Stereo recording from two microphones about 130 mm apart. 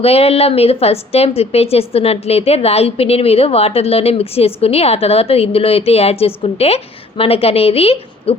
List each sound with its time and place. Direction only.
0.0 s a woman's voice: 50° left (ahead or behind)